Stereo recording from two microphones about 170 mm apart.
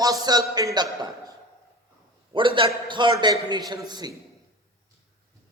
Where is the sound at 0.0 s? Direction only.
20° right (ahead or behind).